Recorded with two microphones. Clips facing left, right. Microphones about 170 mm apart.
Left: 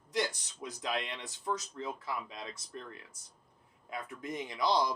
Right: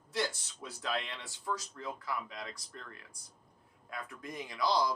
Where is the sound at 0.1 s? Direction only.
15° left (ahead or behind).